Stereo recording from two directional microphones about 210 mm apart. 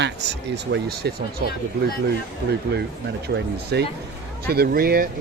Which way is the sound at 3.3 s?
50° right (ahead or behind).